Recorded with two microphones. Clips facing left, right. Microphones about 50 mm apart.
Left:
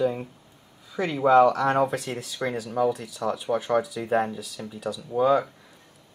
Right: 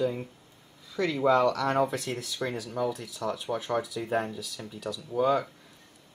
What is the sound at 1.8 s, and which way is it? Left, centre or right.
Speech, centre.